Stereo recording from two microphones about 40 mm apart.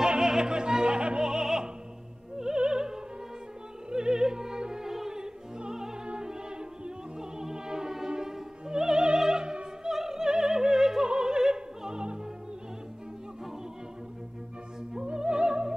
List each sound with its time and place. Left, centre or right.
0.0 s music: centre
0.7 s opera: centre
2.3 s music: centre
3.9 s opera: centre
11.1 s music: centre
15.0 s music: right